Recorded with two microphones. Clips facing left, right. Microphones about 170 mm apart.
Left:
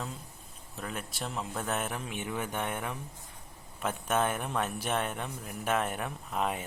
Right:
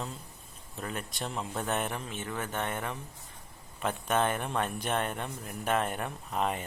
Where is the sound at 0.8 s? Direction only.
Centre (ahead or behind).